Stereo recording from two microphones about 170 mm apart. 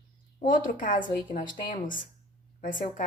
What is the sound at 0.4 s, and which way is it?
Speech, 50° left (ahead or behind).